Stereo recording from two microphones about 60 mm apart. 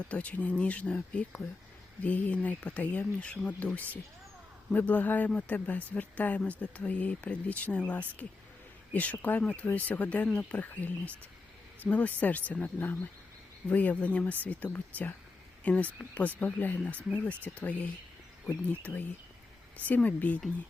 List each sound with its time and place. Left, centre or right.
0.1 s speech: left